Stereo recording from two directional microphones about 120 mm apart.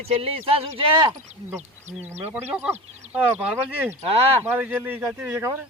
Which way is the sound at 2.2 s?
10° right (ahead or behind).